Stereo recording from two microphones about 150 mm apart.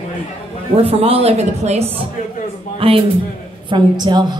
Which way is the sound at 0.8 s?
40° right (ahead or behind).